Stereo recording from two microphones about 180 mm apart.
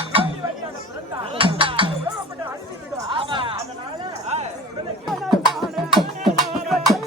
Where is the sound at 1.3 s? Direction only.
30° right (ahead or behind).